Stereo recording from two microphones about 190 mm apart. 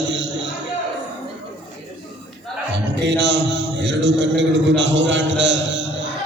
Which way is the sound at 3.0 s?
65° right (ahead or behind).